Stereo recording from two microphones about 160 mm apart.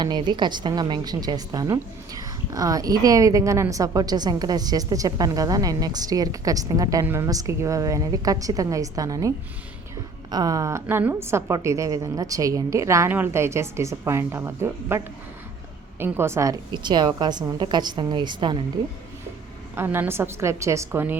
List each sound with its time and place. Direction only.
0.0 s a woman's voice: 30° right (ahead or behind)
10.3 s a woman's voice: 20° right (ahead or behind)
19.7 s a woman's voice: 15° right (ahead or behind)